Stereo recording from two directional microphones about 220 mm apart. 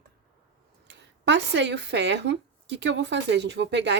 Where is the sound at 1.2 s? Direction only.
50° right (ahead or behind).